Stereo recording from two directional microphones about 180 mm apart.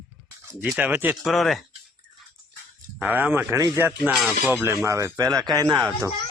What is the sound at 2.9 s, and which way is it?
Speech, 10° right (ahead or behind).